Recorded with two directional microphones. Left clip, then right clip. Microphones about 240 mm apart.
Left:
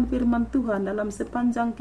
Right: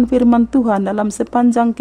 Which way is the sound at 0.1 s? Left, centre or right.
Right.